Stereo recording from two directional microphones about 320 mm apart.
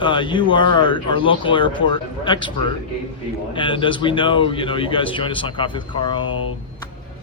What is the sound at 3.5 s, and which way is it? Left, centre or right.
A man's voice, centre.